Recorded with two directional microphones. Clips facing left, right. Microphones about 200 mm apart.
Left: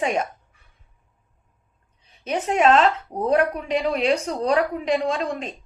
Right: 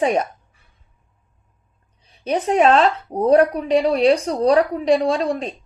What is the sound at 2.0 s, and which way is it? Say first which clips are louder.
A woman's voice: right 4 dB; 35° right (ahead or behind).